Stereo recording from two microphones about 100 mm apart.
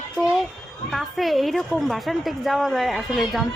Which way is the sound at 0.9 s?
Centre (ahead or behind).